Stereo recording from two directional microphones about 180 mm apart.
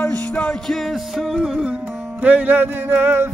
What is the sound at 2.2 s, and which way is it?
Speech, 10° right (ahead or behind).